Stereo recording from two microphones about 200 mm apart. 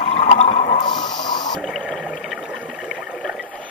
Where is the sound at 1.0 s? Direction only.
20° left (ahead or behind).